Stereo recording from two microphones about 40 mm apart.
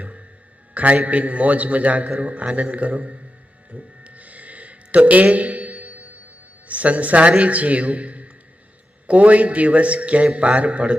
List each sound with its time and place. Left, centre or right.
0.7 s a man's voice: right
3.7 s a sound: right
6.7 s a man's voice: right